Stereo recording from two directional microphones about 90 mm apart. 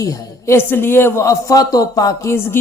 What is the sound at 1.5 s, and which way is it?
Speech, 40° left (ahead or behind).